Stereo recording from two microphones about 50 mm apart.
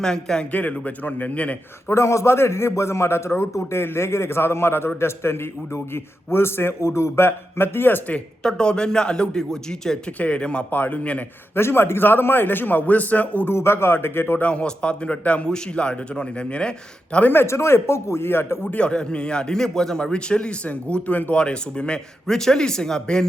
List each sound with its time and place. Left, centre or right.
0.0 s a man's voice: centre
0.5 s a man's voice: left
1.9 s a man's voice: left
7.3 s a man's voice: left
8.4 s a man's voice: centre
10.2 s speech: left
10.7 s a man's voice: left
11.5 s a man's voice: left
13.5 s a man's voice: left
14.4 s speech: left
17.4 s a man's voice: left
18.7 s speech: left
21.3 s a man's voice: centre